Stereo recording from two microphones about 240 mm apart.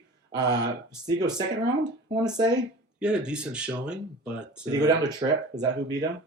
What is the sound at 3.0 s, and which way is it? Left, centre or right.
Speech, centre.